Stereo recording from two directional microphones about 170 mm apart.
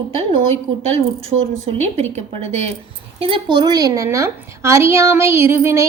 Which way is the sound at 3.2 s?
30° right (ahead or behind).